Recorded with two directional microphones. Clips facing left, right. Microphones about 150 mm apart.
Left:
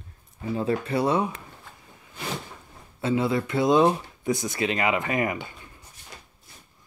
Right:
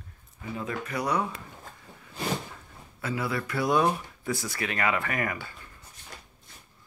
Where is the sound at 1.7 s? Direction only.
40° right (ahead or behind).